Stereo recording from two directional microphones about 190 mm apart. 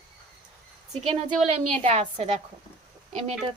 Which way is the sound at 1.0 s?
40° right (ahead or behind).